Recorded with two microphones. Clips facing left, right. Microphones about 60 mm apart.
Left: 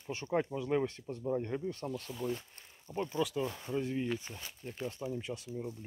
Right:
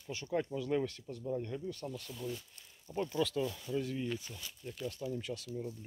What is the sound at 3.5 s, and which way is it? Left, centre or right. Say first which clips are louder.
Speech: left 1 dB; left.